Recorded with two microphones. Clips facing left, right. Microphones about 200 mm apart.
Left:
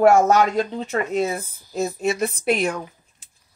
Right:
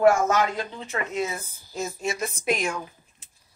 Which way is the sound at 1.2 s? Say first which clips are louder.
Left 6 dB; 35° left (ahead or behind).